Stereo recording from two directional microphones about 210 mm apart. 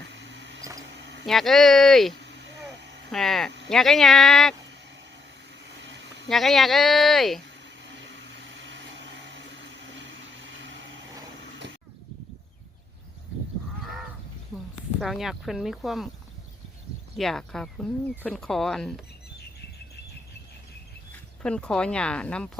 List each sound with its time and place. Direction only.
0.1 s a sound: 60° right (ahead or behind)
0.6 s mouse: 15° right (ahead or behind)
0.9 s a sound: 55° right (ahead or behind)
1.3 s speech: centre (ahead or behind)
2.2 s a sound: 55° right (ahead or behind)
3.1 s speech: centre (ahead or behind)
5.8 s a sound: 60° right (ahead or behind)
6.2 s speech: centre (ahead or behind)
7.8 s vacuum cleaner: 60° right (ahead or behind)
10.0 s vehicle: 60° right (ahead or behind)
15.0 s speech: centre (ahead or behind)
17.2 s speech: centre (ahead or behind)
21.4 s speech: 5° left (ahead or behind)